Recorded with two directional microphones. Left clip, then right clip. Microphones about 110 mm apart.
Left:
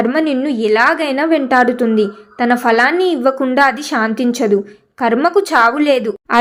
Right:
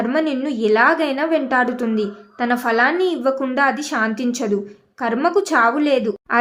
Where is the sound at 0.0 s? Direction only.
25° left (ahead or behind).